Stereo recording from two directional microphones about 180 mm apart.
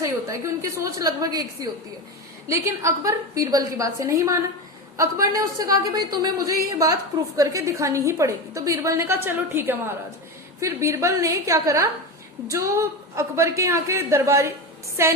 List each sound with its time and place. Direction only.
0.0 s a woman's voice: 15° right (ahead or behind)
2.5 s a woman's voice: 15° right (ahead or behind)